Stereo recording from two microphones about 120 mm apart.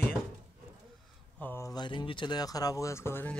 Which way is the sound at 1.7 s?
40° left (ahead or behind).